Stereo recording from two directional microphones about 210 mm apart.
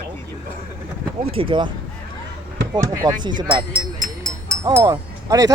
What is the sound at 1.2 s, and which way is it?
Speech, 25° right (ahead or behind).